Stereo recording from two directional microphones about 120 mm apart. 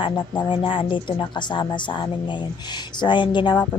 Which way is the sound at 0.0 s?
45° left (ahead or behind).